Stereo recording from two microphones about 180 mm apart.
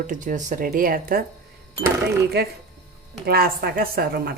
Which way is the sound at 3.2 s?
55° right (ahead or behind).